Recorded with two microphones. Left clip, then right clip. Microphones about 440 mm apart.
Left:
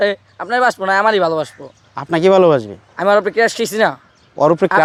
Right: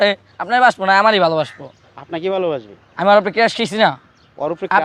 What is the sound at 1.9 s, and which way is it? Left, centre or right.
Speech, left.